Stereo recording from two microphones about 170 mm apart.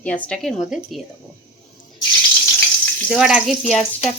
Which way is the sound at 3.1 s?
Centre (ahead or behind).